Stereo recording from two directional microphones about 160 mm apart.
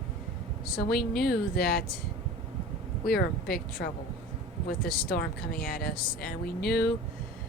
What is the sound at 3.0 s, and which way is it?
Speech, 70° left (ahead or behind).